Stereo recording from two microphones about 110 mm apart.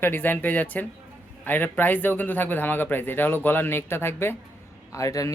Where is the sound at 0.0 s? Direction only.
15° left (ahead or behind).